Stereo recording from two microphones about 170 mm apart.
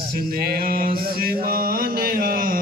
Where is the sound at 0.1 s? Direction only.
60° right (ahead or behind).